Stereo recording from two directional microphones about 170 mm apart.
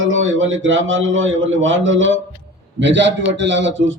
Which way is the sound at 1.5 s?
90° right.